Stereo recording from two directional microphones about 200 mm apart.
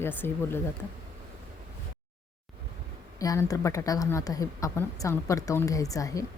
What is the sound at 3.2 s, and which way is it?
A woman's voice, 15° left (ahead or behind).